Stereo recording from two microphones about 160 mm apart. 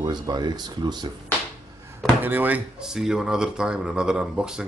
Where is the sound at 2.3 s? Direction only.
10° right (ahead or behind).